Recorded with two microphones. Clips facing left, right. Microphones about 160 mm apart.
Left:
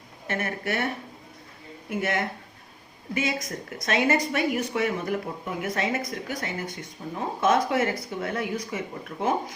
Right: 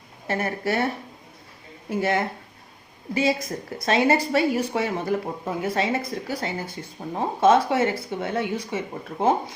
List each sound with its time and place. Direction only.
0.3 s speech: 35° right (ahead or behind)
1.9 s speech: 30° right (ahead or behind)